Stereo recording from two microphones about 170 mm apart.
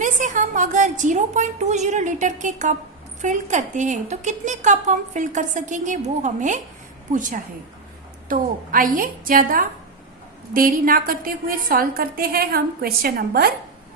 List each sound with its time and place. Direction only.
0.0 s a woman's voice: 50° right (ahead or behind); by 13.5 s 65° right (ahead or behind)